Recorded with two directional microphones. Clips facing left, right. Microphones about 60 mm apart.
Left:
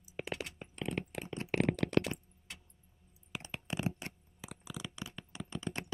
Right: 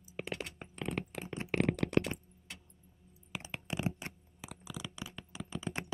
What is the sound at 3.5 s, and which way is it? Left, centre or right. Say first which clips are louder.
Computer keyboard: even; centre.